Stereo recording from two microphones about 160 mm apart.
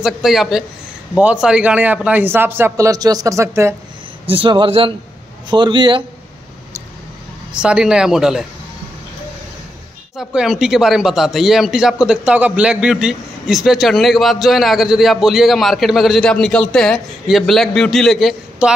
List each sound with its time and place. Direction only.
0.0 s a man's voice: centre (ahead or behind); by 3.7 s 20° right (ahead or behind)
4.3 s speech: 30° right (ahead or behind)
7.5 s a man's voice: 5° right (ahead or behind)
10.1 s a man's voice: 5° right (ahead or behind)